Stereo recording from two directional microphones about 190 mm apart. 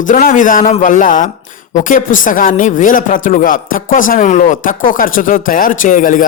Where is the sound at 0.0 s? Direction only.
45° left (ahead or behind).